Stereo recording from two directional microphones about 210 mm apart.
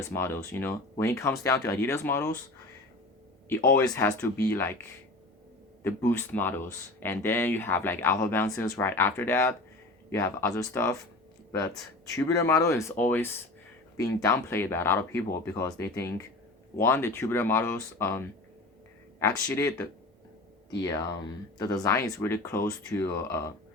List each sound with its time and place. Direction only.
0.0 s speech: 10° left (ahead or behind)
3.7 s speech: 10° left (ahead or behind)
5.8 s speech: 10° left (ahead or behind)
12.1 s speech: 15° left (ahead or behind)
20.8 s speech: 20° left (ahead or behind)